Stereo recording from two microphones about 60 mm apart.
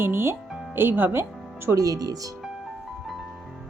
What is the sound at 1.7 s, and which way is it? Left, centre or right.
Speech, right.